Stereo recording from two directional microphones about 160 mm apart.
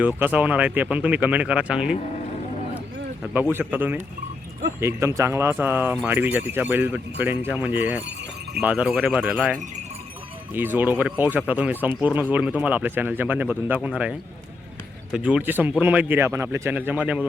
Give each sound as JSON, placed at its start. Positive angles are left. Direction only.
{"t": 0.2, "sound": "speech", "side_deg": -10}
{"t": 3.5, "sound": "speech", "side_deg": -10}
{"t": 15.1, "sound": "speech", "side_deg": -10}